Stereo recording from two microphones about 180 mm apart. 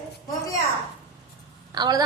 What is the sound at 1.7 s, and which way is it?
Speech, 20° right (ahead or behind).